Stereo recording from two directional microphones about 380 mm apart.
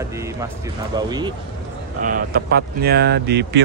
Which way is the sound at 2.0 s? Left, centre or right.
Right.